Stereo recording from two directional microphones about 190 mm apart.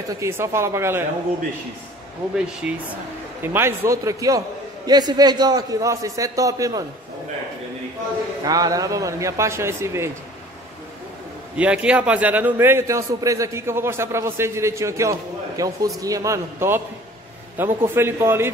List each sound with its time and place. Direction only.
0.1 s a man's voice: 15° right (ahead or behind)
2.6 s a man's voice: 5° right (ahead or behind)
8.5 s a man's voice: 20° right (ahead or behind)
11.5 s a man's voice: 5° right (ahead or behind)